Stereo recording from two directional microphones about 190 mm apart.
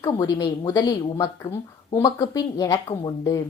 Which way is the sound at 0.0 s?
20° left (ahead or behind).